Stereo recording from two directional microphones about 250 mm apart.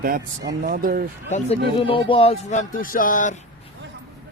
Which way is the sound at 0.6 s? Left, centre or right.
Right.